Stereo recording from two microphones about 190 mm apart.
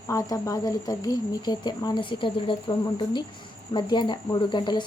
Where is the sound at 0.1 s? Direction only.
15° left (ahead or behind).